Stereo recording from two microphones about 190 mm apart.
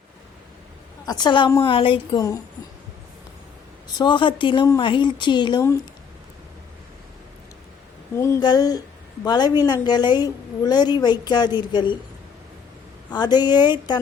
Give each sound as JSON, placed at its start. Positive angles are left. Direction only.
{"t": 1.0, "sound": "a woman's voice", "side_deg": 20}
{"t": 3.8, "sound": "a woman's voice", "side_deg": 25}
{"t": 8.1, "sound": "a woman's voice", "side_deg": 15}
{"t": 13.1, "sound": "a woman's voice", "side_deg": 20}